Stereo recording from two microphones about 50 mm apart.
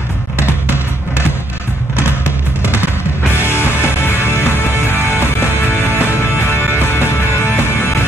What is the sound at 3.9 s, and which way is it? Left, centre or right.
Music, left.